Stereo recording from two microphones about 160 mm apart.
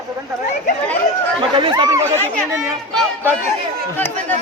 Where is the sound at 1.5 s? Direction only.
30° right (ahead or behind).